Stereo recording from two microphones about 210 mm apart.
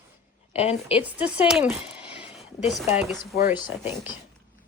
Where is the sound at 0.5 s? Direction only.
30° left (ahead or behind).